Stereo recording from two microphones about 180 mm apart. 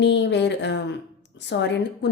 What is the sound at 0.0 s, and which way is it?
A woman's voice, 75° left (ahead or behind).